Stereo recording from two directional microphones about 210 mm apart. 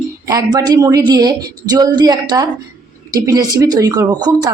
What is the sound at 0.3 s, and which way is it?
A woman's voice, 20° right (ahead or behind).